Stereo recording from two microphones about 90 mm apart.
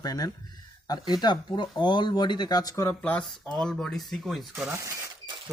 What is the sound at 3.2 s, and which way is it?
Speech, 5° left (ahead or behind).